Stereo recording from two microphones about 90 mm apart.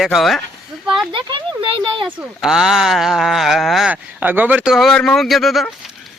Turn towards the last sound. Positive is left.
turn(degrees=0)  # may be behind; listen again after turning